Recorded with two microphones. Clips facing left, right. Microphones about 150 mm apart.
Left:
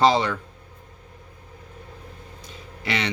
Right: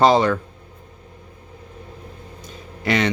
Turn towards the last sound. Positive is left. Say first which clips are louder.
# right 7 dB
turn(degrees=-45)  # may be behind; listen again after turning